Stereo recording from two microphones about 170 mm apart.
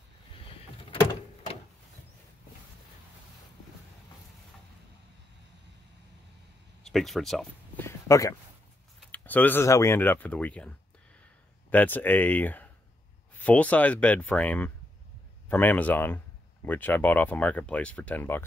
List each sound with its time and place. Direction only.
6.8 s speech: centre (ahead or behind)
7.7 s a sound: 15° left (ahead or behind)
9.0 s speech: 10° left (ahead or behind)
11.7 s speech: 10° left (ahead or behind)